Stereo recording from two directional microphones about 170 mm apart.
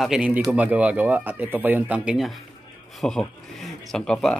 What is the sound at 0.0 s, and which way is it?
Speech, 5° right (ahead or behind).